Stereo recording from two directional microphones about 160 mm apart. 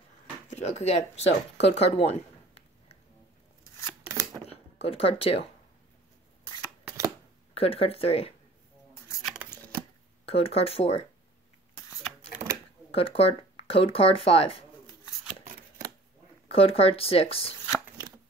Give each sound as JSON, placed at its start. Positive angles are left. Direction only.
{"t": 0.5, "sound": "speech", "side_deg": 45}
{"t": 4.1, "sound": "a sound", "side_deg": -20}
{"t": 4.5, "sound": "speech", "side_deg": 40}
{"t": 7.5, "sound": "speech", "side_deg": 35}
{"t": 9.2, "sound": "a sound", "side_deg": -5}
{"t": 10.2, "sound": "speech", "side_deg": 35}
{"t": 12.9, "sound": "speech", "side_deg": 35}
{"t": 16.4, "sound": "speech", "side_deg": 40}